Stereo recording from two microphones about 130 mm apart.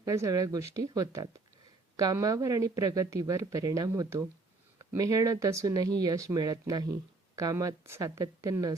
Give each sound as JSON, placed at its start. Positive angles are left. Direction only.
{"t": 0.0, "sound": "speech", "side_deg": -25}